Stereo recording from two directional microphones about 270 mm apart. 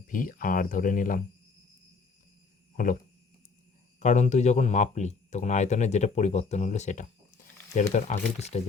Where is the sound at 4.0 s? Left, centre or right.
Left.